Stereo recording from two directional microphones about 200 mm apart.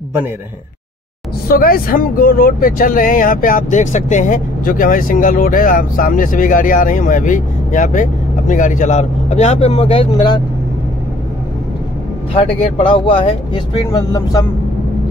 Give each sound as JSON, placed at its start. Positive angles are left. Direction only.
{"t": 1.5, "sound": "speech", "side_deg": 45}
{"t": 12.4, "sound": "speech", "side_deg": 30}